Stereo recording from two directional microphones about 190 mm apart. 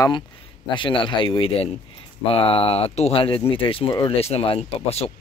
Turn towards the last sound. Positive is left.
turn(degrees=30)  # may be behind; listen again after turning